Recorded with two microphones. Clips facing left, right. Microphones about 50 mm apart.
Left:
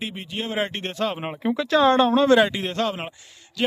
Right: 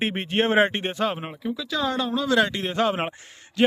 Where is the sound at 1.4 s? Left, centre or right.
Left.